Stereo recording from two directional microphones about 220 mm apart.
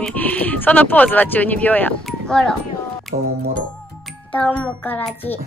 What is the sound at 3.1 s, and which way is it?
Music, 40° right (ahead or behind).